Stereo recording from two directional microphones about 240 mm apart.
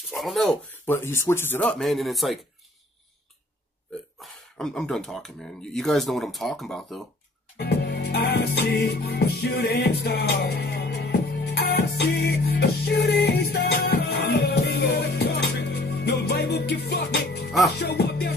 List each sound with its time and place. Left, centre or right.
0.1 s speech: centre
4.2 s speech: centre
7.5 s music: left